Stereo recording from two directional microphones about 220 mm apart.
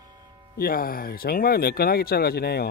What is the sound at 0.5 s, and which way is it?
Speech, 40° left (ahead or behind).